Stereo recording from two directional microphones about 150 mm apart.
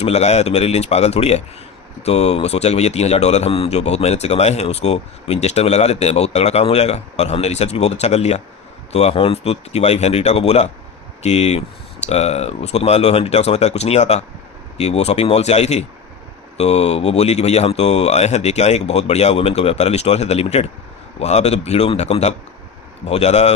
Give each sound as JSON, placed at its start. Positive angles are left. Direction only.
{"t": 0.0, "sound": "speech", "side_deg": 45}